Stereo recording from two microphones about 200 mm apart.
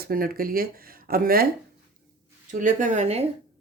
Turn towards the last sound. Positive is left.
turn(degrees=-35)  # may be behind; listen again after turning